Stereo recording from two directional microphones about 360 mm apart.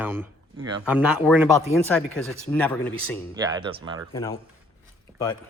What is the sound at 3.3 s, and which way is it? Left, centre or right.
Speech, centre.